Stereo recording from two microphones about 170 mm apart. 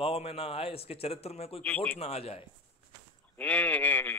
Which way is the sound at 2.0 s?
35° left (ahead or behind).